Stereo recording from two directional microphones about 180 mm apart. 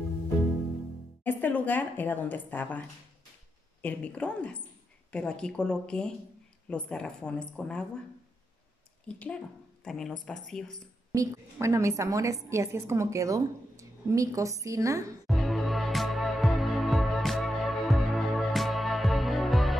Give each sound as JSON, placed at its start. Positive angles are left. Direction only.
{"t": 1.2, "sound": "a woman's voice", "side_deg": 10}
{"t": 3.8, "sound": "speech", "side_deg": 5}
{"t": 9.0, "sound": "speech", "side_deg": 5}
{"t": 11.1, "sound": "a woman's voice", "side_deg": -15}
{"t": 15.2, "sound": "music", "side_deg": 0}